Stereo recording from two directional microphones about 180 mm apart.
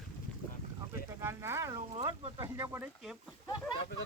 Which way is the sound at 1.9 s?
30° right (ahead or behind).